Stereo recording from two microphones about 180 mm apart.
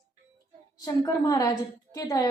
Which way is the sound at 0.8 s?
20° left (ahead or behind).